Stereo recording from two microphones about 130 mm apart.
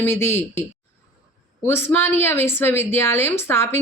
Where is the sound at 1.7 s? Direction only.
15° left (ahead or behind).